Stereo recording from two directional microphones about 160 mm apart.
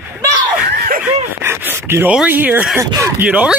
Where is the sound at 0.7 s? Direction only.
65° right (ahead or behind).